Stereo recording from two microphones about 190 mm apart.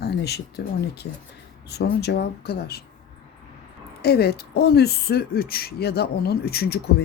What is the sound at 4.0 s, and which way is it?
Speech, 55° left (ahead or behind).